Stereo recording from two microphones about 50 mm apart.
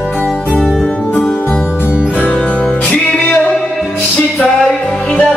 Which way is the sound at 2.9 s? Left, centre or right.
Left.